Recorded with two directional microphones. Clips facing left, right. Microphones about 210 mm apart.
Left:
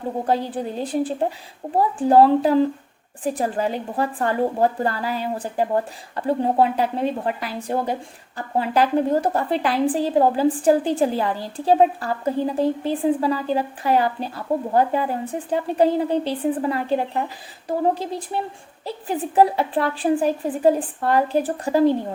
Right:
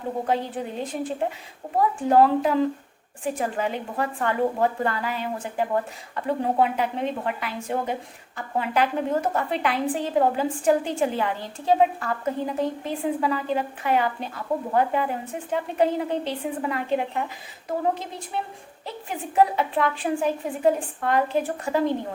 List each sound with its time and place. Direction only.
0.3 s a woman's voice: 35° left (ahead or behind)